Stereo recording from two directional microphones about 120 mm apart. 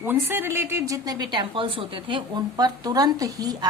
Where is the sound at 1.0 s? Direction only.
35° right (ahead or behind).